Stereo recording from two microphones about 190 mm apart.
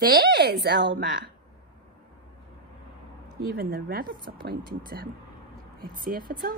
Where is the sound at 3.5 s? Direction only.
55° right (ahead or behind).